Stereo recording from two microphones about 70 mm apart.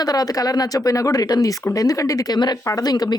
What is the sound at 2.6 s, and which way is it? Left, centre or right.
Speech, left.